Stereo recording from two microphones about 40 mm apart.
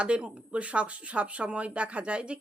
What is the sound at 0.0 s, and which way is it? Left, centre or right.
Speech, right.